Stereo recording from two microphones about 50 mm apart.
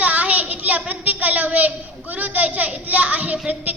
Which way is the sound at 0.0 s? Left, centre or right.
Right.